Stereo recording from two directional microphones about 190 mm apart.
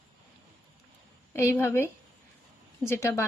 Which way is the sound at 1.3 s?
15° left (ahead or behind).